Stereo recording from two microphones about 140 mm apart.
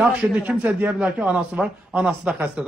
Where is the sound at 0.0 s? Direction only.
5° right (ahead or behind).